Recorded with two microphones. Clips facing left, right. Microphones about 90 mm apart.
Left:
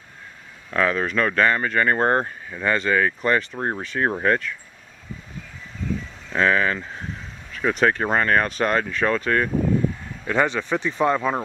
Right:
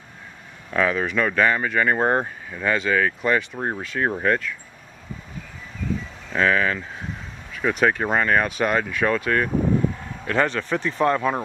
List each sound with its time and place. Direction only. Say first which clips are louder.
0.7 s speech: even; 5° right (ahead or behind)
6.3 s speech: even; centre (ahead or behind)